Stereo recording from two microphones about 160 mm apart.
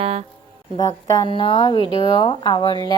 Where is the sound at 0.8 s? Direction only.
25° left (ahead or behind).